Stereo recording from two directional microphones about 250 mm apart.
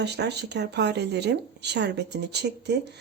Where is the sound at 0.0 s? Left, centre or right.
Right.